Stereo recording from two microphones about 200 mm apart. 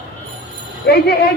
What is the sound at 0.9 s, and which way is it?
Speech, 55° left (ahead or behind).